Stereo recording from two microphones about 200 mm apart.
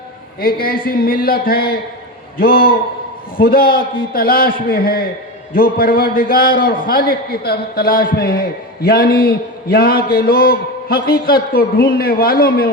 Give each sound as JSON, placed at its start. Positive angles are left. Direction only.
{"t": 0.3, "sound": "a man's voice", "side_deg": 50}